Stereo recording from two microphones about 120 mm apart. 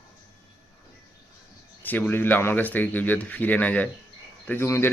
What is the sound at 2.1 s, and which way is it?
Speech, 15° left (ahead or behind).